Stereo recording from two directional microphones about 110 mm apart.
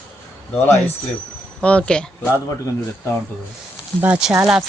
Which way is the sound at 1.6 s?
10° left (ahead or behind).